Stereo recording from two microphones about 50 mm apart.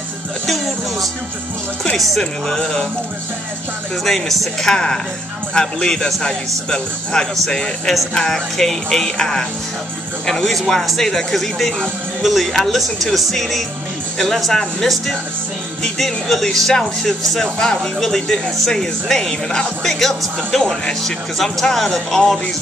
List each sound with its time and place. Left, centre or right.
2.0 s speech: centre
4.0 s speech: centre